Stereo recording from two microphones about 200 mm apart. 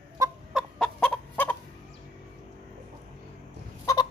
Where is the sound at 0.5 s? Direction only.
Centre (ahead or behind).